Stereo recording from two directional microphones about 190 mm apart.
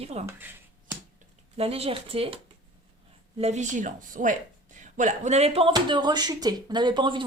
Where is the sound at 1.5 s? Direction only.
30° right (ahead or behind).